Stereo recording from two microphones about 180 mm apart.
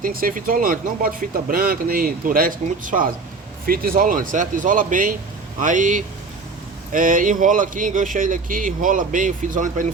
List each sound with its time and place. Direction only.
0.0 s speech: 50° right (ahead or behind)